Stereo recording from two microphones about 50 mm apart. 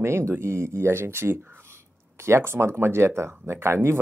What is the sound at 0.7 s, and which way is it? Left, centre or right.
Speech, right.